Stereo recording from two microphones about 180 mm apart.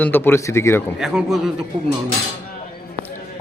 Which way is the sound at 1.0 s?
Centre (ahead or behind).